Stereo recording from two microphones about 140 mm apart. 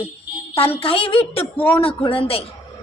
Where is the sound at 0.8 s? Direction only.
40° left (ahead or behind).